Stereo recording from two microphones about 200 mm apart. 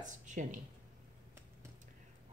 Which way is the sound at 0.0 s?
40° right (ahead or behind).